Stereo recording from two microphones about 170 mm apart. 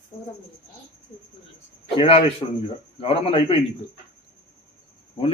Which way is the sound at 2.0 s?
35° left (ahead or behind).